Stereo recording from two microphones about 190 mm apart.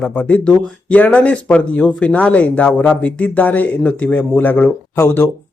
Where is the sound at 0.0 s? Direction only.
5° left (ahead or behind).